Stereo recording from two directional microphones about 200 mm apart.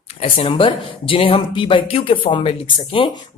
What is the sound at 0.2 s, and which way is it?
A woman's voice, 30° left (ahead or behind).